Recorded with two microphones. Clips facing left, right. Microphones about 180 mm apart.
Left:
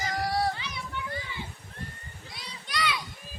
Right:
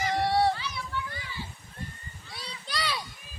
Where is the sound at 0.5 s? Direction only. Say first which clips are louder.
Right 2 dB; 20° left (ahead or behind).